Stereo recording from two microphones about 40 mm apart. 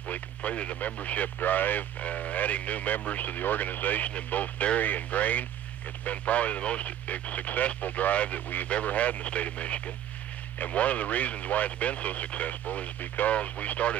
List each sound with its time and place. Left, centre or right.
0.1 s speech: left
13.3 s speech: left